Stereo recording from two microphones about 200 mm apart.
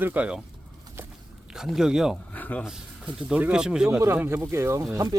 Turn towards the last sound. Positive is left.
turn(degrees=-20)  # may be behind; listen again after turning